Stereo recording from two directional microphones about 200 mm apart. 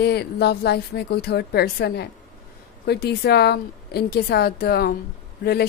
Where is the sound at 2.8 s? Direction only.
55° left (ahead or behind).